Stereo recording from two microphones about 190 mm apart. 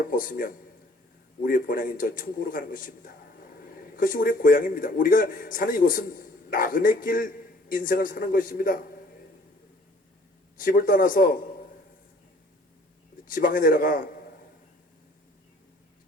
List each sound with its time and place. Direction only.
0.1 s a man's voice: 50° left (ahead or behind)
10.6 s a man's voice: 45° left (ahead or behind)
13.2 s a man's voice: 45° left (ahead or behind)